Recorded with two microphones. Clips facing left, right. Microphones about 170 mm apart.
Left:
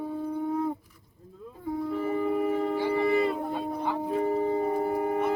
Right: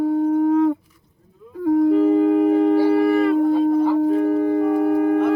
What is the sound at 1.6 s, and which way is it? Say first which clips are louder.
Shofar: right 15 dB; 85° right.